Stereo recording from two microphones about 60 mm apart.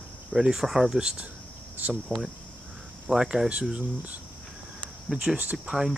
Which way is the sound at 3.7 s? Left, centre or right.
Right.